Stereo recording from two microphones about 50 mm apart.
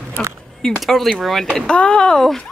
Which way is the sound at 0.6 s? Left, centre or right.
Centre.